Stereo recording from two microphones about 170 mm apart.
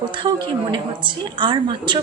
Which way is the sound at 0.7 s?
30° right (ahead or behind).